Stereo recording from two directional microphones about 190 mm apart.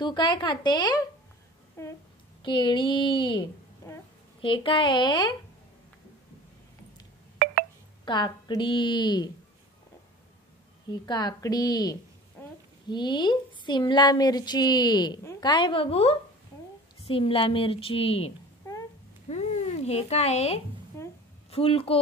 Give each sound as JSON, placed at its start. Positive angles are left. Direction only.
{"t": 0.0, "sound": "a woman's voice", "side_deg": 25}
{"t": 2.4, "sound": "a woman's voice", "side_deg": 25}
{"t": 3.8, "sound": "a sound", "side_deg": 15}
{"t": 4.4, "sound": "a woman's voice", "side_deg": 25}
{"t": 8.0, "sound": "a woman's voice", "side_deg": 25}
{"t": 11.1, "sound": "a woman's voice", "side_deg": 20}
{"t": 18.6, "sound": "a sound", "side_deg": 15}
{"t": 19.3, "sound": "speech", "side_deg": 35}
{"t": 21.0, "sound": "a sound", "side_deg": 15}
{"t": 21.5, "sound": "a woman's voice", "side_deg": 30}